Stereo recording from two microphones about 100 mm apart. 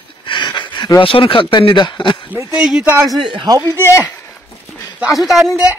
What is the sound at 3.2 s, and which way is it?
Speech, 50° right (ahead or behind).